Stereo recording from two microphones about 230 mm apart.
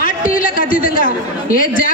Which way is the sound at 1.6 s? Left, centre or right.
Left.